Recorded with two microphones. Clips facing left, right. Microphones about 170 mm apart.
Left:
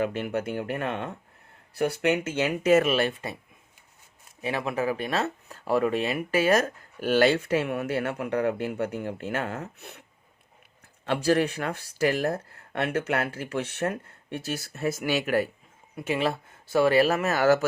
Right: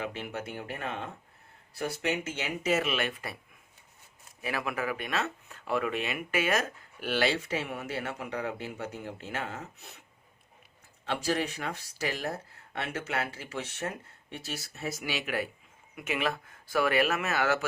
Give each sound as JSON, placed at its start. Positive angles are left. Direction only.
{"t": 0.0, "sound": "speech", "side_deg": 55}
{"t": 2.9, "sound": "speech", "side_deg": 30}
{"t": 4.4, "sound": "speech", "side_deg": 25}
{"t": 11.0, "sound": "speech", "side_deg": 55}
{"t": 16.0, "sound": "speech", "side_deg": 30}